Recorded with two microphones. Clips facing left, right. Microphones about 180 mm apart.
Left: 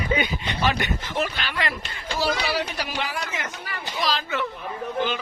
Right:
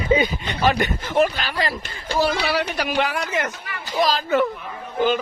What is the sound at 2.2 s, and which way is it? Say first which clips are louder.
Speech: right 3 dB; 60° right (ahead or behind).